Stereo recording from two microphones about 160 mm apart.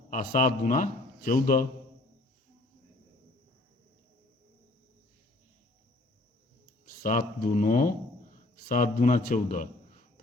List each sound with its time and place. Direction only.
0.1 s a man's voice: 55° left (ahead or behind)
7.0 s a man's voice: 60° left (ahead or behind)